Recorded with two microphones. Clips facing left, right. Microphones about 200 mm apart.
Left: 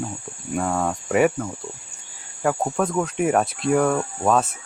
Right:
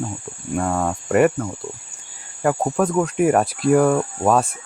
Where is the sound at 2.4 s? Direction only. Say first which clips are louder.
Right 3 dB; 5° right (ahead or behind).